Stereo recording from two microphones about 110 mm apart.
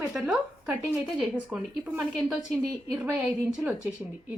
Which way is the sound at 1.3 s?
15° right (ahead or behind).